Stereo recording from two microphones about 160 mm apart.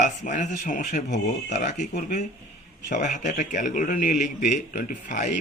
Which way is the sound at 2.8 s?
50° left (ahead or behind).